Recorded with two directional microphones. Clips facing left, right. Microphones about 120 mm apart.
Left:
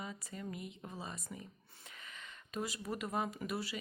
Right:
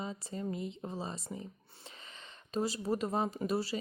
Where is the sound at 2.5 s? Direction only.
30° right (ahead or behind).